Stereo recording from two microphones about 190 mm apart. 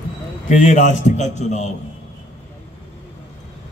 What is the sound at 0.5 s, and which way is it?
A man's voice, 40° left (ahead or behind).